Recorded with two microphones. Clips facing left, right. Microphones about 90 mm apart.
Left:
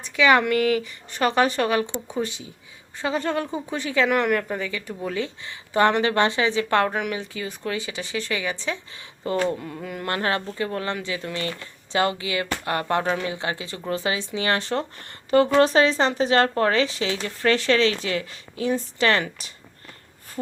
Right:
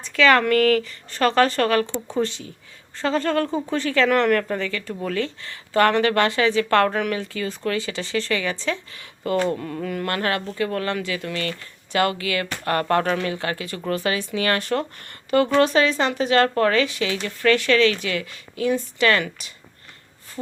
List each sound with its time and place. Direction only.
0.0 s speech: 15° left (ahead or behind); by 19.5 s 30° left (ahead or behind)